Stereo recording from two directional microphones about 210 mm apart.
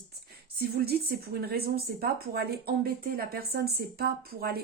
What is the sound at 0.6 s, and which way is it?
Speech, 50° right (ahead or behind).